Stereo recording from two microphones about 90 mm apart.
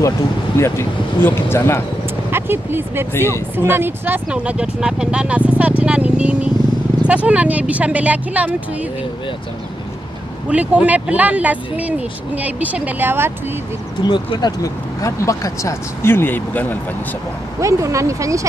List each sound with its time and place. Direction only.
0.6 s speech: 30° left (ahead or behind)
2.3 s speech: 25° right (ahead or behind)
3.1 s speech: 25° left (ahead or behind)
3.7 s speech: 25° right (ahead or behind)
10.5 s speech: 15° right (ahead or behind)
14.0 s speech: 60° left (ahead or behind)
14.6 s speech: 40° left (ahead or behind); by 16.7 s 20° left (ahead or behind)
17.6 s speech: 35° right (ahead or behind)